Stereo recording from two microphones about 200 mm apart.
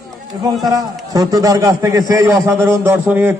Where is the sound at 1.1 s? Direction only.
20° right (ahead or behind).